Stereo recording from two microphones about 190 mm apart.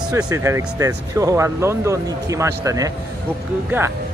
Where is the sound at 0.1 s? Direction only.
15° right (ahead or behind).